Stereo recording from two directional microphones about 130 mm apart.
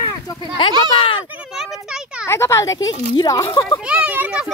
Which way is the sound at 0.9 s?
40° left (ahead or behind).